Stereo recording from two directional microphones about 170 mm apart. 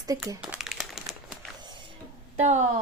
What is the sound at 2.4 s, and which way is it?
Speech, 45° right (ahead or behind).